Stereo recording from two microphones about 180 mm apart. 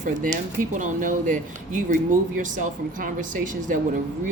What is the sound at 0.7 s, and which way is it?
Speech, 45° right (ahead or behind).